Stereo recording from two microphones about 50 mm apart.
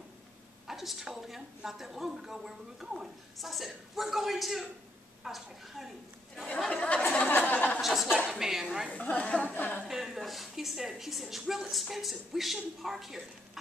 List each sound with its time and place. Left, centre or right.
0.7 s a woman's voice: centre
6.7 s a sound: left
7.8 s a woman's voice: centre
8.9 s speech: left
9.8 s a woman's voice: centre